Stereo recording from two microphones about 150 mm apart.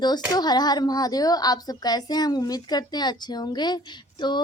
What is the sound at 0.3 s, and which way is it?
A woman's voice, 25° left (ahead or behind).